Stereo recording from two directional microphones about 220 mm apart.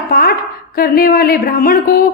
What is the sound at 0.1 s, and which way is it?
A woman's voice, 45° left (ahead or behind).